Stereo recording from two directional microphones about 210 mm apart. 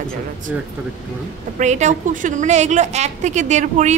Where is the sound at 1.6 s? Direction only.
35° right (ahead or behind).